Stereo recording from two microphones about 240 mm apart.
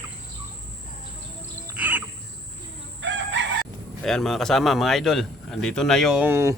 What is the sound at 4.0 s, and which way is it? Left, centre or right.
A man's voice, centre.